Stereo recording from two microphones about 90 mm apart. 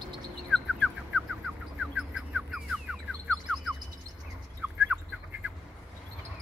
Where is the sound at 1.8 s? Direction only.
10° right (ahead or behind).